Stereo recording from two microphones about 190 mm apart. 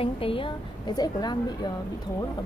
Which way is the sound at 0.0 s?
30° left (ahead or behind).